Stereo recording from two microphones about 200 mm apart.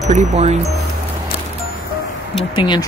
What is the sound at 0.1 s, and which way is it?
Speech, 35° right (ahead or behind).